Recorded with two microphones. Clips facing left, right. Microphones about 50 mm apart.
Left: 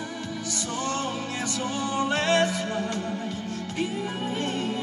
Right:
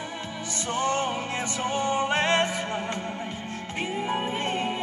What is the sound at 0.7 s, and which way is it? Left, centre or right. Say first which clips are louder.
Music: right 4 dB; right.